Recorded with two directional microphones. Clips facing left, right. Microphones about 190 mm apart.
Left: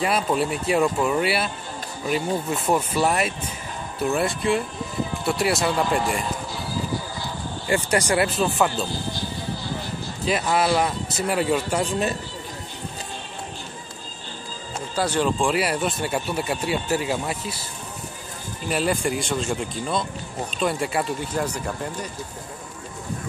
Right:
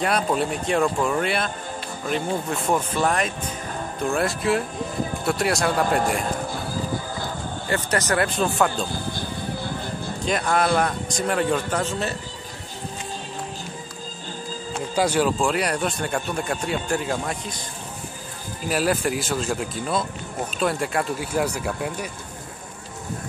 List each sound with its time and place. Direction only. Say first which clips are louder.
0.0 s speech: even; centre (ahead or behind)
5.9 s speech: right 1 dB; 50° right (ahead or behind)
6.2 s music: right 2 dB; 50° right (ahead or behind)
7.6 s speech: left 3 dB; 10° left (ahead or behind)
8.9 s music: even; 55° right (ahead or behind)
10.2 s speech: even; 5° left (ahead or behind)
15.0 s speech: right 1 dB; 10° right (ahead or behind); by 17.6 s 5° left (ahead or behind)
18.7 s speech: right 1 dB; 5° right (ahead or behind)